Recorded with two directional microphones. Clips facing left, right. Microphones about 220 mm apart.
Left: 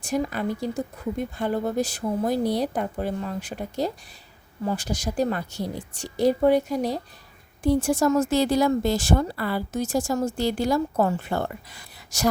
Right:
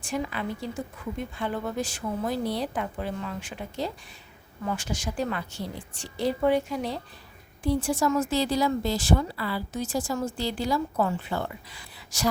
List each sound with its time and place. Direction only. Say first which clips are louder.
0.0 s speech: left 5 dB; 40° left (ahead or behind)